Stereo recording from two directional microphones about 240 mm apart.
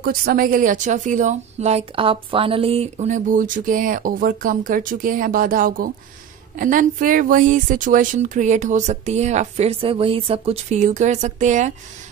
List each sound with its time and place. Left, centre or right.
0.0 s a woman's voice: right